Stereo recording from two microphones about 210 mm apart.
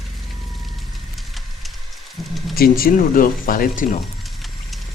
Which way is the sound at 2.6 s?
45° left (ahead or behind).